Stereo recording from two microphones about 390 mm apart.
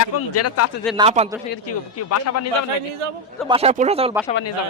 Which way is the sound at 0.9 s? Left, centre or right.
Centre.